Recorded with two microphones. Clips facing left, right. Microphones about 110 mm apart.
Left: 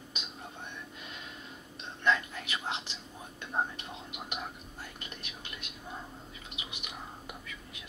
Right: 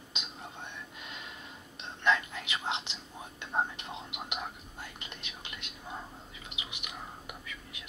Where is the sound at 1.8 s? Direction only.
20° right (ahead or behind).